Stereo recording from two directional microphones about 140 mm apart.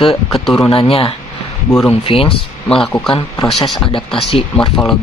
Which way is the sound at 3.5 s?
Centre (ahead or behind).